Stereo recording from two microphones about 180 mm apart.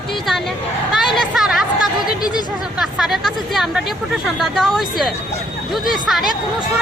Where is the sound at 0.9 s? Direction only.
Centre (ahead or behind).